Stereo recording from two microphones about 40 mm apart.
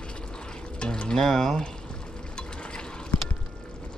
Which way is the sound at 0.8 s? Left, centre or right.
Left.